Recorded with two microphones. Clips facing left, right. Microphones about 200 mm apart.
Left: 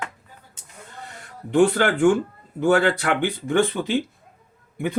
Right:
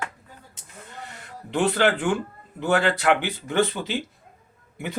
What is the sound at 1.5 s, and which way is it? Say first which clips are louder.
Speech: left 4 dB; 50° left (ahead or behind).